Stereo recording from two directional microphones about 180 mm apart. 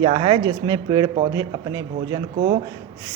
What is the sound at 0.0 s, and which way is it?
A man's voice, 30° right (ahead or behind).